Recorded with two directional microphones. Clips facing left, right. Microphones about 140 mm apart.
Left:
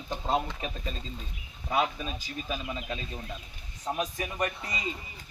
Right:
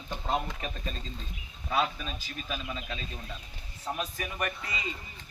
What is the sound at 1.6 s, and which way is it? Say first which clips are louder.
A man's voice: left 1 dB; 20° left (ahead or behind).